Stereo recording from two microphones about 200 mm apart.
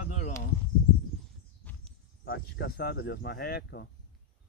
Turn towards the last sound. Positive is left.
turn(degrees=50)  # may be behind; listen again after turning